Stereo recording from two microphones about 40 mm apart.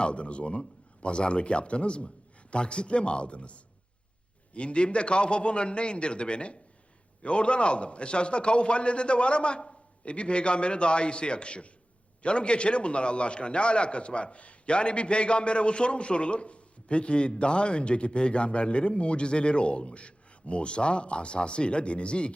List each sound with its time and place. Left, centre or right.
0.0 s a man's voice: left